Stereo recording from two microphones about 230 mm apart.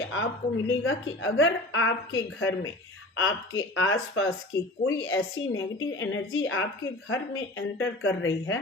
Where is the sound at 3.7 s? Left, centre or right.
Left.